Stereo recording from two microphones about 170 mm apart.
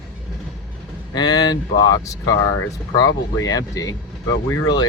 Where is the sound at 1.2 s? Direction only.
25° left (ahead or behind).